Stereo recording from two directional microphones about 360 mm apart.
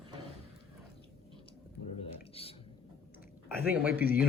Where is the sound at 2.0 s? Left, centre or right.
Centre.